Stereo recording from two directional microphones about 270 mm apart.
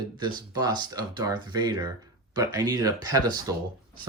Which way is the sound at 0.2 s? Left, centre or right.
Centre.